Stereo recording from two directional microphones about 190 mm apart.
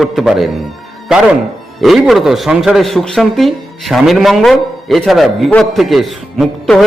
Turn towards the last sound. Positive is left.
turn(degrees=0)  # may be behind; listen again after turning